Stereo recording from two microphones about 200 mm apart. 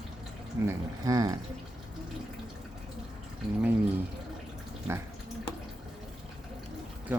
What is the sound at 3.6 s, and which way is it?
Speech, 10° right (ahead or behind).